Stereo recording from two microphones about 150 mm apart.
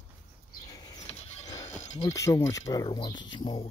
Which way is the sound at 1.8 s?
50° left (ahead or behind).